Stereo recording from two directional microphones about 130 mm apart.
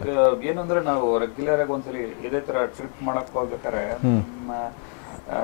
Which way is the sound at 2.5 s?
15° left (ahead or behind).